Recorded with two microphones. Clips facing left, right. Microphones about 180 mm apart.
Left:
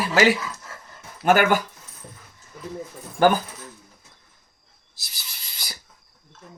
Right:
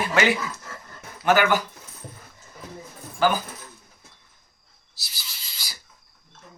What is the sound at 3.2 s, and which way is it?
Speech, 55° left (ahead or behind).